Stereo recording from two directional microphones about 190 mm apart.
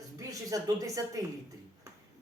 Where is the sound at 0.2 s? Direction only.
15° right (ahead or behind).